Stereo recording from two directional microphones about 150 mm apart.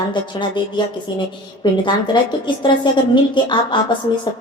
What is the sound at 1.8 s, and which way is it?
A woman's voice, 30° left (ahead or behind).